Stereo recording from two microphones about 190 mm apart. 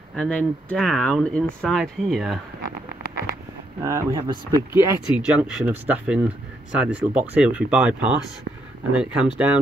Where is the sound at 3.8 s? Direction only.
15° right (ahead or behind).